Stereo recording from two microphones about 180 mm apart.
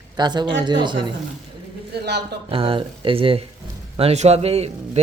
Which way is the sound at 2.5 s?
30° right (ahead or behind).